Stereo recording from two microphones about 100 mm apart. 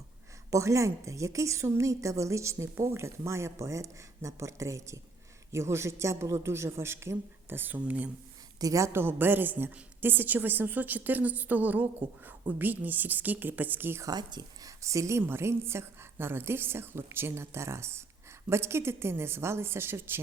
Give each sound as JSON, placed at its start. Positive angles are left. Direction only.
{"t": 0.5, "sound": "a woman's voice", "side_deg": -30}
{"t": 8.6, "sound": "a woman's voice", "side_deg": -30}
{"t": 14.0, "sound": "speech", "side_deg": -45}
{"t": 14.8, "sound": "a woman's voice", "side_deg": -30}